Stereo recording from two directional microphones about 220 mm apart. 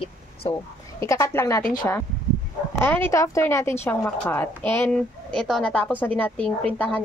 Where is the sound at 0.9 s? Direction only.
15° left (ahead or behind).